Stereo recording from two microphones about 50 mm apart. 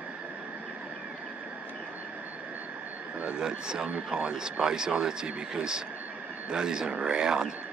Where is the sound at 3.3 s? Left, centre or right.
Centre.